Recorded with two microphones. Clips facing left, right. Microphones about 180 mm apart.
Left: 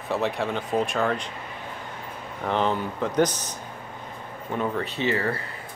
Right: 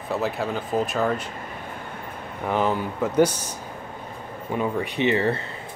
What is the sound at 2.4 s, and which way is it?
Speech, 10° right (ahead or behind).